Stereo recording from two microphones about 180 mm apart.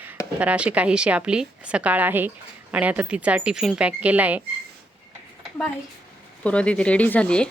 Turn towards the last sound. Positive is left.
turn(degrees=5)  # may be behind; listen again after turning